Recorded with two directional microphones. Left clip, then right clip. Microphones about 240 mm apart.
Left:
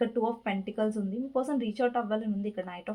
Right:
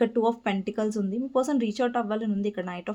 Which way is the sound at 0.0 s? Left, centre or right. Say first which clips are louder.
Right 5 dB; right.